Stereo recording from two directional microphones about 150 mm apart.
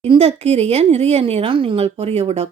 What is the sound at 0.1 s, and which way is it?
Speech, 40° right (ahead or behind).